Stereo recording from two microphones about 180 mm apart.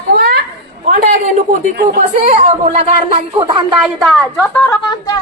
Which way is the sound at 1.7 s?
65° right (ahead or behind).